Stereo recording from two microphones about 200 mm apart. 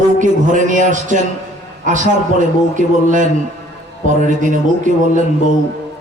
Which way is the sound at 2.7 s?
40° right (ahead or behind).